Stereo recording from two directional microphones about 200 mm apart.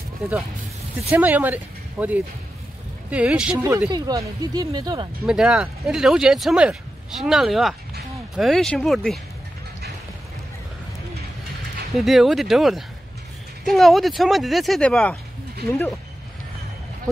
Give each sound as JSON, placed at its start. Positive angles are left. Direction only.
{"t": 0.2, "sound": "speech", "side_deg": -10}
{"t": 5.2, "sound": "speech", "side_deg": -5}
{"t": 11.9, "sound": "speech", "side_deg": 0}